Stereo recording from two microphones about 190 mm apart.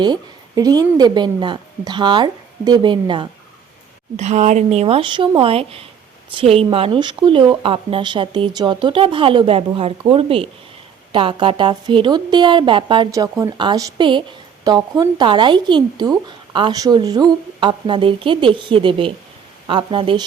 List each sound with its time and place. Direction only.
0.0 s a woman's voice: 20° right (ahead or behind)
4.2 s a woman's voice: 35° right (ahead or behind)